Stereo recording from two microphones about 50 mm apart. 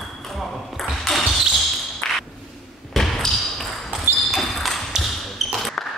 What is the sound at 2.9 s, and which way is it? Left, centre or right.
Basketball bounce, centre.